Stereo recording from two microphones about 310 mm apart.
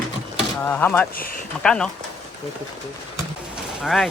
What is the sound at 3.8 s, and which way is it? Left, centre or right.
Speech, centre.